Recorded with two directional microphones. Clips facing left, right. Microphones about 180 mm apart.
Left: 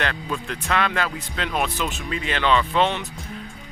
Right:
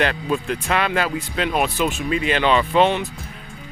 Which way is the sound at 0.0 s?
15° right (ahead or behind).